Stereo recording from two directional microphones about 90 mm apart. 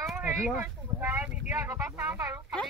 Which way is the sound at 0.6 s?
20° right (ahead or behind).